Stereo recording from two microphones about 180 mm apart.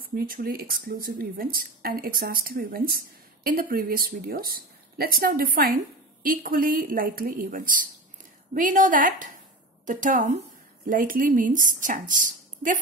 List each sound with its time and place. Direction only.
0.0 s speech: 55° right (ahead or behind)